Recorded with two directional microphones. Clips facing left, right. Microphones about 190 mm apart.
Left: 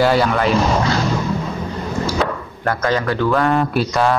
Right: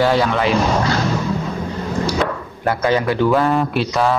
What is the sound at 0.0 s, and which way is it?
Speech, centre (ahead or behind).